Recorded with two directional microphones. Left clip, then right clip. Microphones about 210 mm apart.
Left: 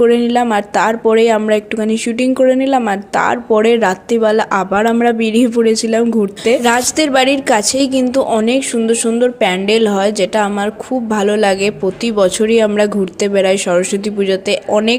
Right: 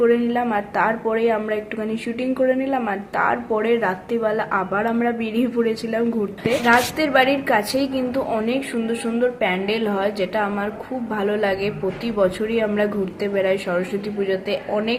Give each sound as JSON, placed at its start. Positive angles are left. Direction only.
{"t": 0.0, "sound": "a woman's voice", "side_deg": 40}